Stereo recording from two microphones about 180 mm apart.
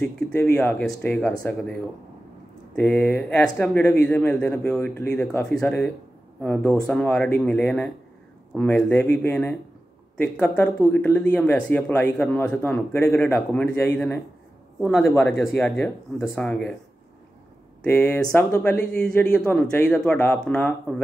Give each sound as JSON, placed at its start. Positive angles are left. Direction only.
{"t": 0.0, "sound": "speech", "side_deg": 5}
{"t": 17.8, "sound": "speech", "side_deg": 5}